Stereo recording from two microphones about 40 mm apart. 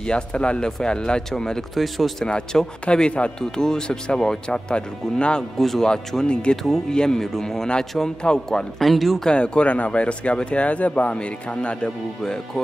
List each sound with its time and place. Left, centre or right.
0.0 s speech: left
1.8 s speech: centre
2.2 s speech: left
3.3 s speech: centre
5.6 s speech: centre
5.9 s speech: left
6.5 s speech: centre
8.7 s speech: centre
9.3 s speech: left